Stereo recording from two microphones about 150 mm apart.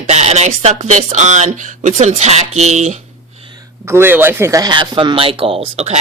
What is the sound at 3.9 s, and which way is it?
Speech, 15° right (ahead or behind).